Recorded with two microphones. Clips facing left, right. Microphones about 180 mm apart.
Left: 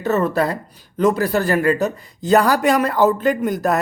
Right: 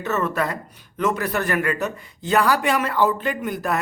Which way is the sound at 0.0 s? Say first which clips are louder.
Left 5 dB; 35° left (ahead or behind).